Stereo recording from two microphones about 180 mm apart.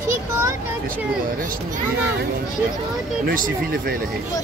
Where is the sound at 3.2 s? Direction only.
50° right (ahead or behind).